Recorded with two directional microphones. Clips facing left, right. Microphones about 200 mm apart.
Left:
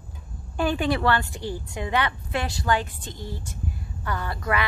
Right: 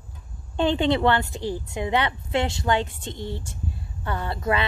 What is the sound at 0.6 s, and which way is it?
Speech, 25° right (ahead or behind).